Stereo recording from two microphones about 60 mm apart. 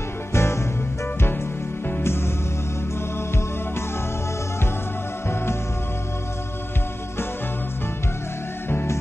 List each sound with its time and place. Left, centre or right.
0.3 s music: left
2.0 s music: left